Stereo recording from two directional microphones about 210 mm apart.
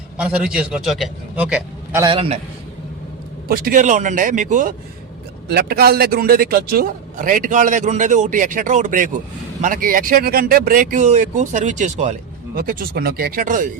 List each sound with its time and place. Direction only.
0.2 s a man's voice: 5° right (ahead or behind)
2.0 s a man's voice: 25° right (ahead or behind)
3.5 s a man's voice: 40° right (ahead or behind)
5.5 s a man's voice: 50° right (ahead or behind)